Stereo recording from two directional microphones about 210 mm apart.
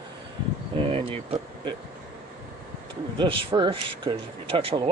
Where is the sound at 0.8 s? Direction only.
25° right (ahead or behind).